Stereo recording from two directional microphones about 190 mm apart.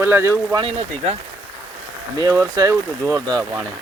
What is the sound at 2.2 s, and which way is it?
Speech, 20° right (ahead or behind).